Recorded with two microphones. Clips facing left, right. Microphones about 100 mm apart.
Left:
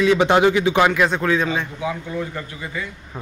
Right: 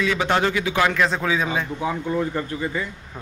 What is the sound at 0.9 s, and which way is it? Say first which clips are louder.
Speech: left 3 dB; 5° left (ahead or behind).